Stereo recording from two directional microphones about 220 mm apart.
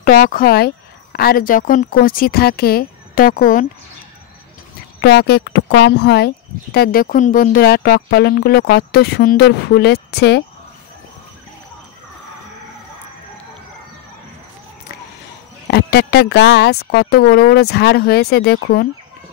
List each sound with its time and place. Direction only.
0.0 s speech: 40° left (ahead or behind)
5.0 s speech: 45° left (ahead or behind)
15.7 s speech: 45° left (ahead or behind)